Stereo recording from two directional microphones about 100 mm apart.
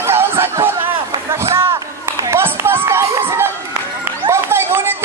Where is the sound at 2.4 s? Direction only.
20° right (ahead or behind).